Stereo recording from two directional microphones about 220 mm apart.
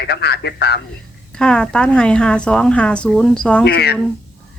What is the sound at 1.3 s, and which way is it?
A woman's voice, 5° left (ahead or behind).